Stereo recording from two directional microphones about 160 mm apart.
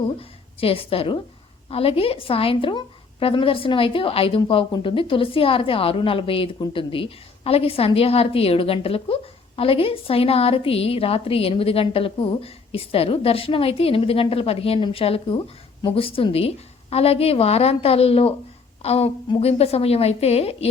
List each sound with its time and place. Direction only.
0.2 s a woman's voice: 35° left (ahead or behind)